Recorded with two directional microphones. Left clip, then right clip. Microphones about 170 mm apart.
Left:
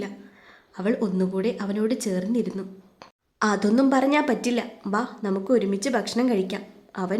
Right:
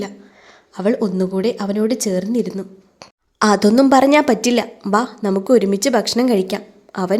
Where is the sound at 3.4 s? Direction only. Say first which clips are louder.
Right 9 dB; 30° right (ahead or behind).